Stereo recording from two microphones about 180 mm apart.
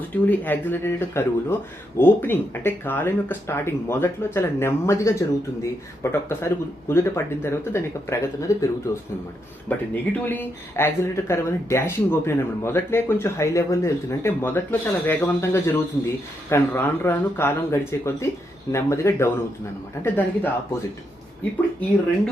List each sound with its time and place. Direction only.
0.1 s speech: 10° left (ahead or behind)